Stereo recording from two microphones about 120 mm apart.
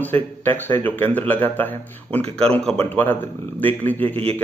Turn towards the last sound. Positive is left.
turn(degrees=15)  # may be behind; listen again after turning